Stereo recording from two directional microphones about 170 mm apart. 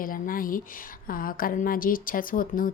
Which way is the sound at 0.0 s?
55° left (ahead or behind).